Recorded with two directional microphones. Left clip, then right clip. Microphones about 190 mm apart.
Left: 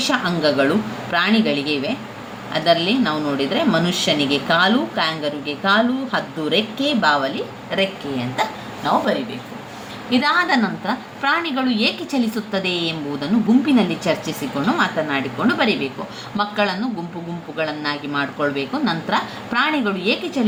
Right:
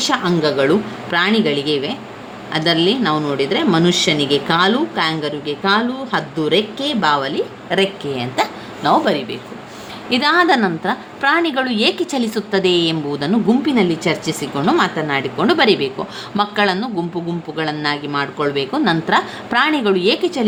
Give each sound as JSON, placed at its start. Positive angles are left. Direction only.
{"t": 0.1, "sound": "a woman's voice", "side_deg": -50}